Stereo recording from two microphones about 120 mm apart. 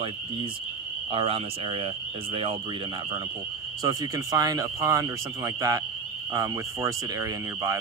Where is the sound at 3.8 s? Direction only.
30° right (ahead or behind).